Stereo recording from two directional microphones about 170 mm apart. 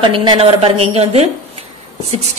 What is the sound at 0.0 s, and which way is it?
A woman's voice, 25° right (ahead or behind).